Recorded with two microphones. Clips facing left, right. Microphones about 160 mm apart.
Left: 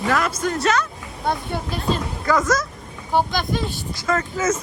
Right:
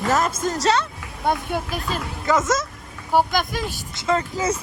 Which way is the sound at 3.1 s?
10° right (ahead or behind).